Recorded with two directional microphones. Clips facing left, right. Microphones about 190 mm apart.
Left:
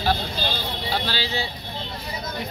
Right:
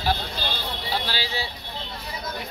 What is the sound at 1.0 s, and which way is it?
Speech, 10° right (ahead or behind).